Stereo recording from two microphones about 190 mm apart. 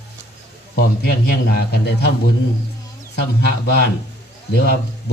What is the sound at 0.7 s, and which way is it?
A man's voice, 55° left (ahead or behind).